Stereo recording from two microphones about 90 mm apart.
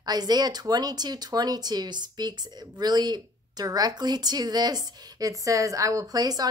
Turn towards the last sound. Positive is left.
turn(degrees=-45)  # may be behind; listen again after turning